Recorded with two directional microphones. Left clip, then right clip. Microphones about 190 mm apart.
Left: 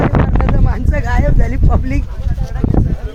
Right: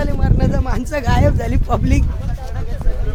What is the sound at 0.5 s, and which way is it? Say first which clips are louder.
Speech: even; 5° right (ahead or behind).